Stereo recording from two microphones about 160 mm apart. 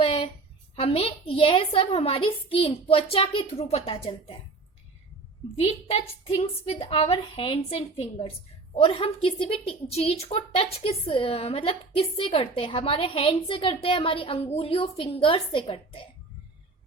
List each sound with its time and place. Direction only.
0.0 s a sound: 30° left (ahead or behind)
0.8 s speech: 35° left (ahead or behind)
5.5 s speech: 35° left (ahead or behind)